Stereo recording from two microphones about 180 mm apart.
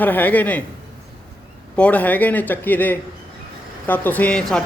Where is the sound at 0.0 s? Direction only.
10° left (ahead or behind).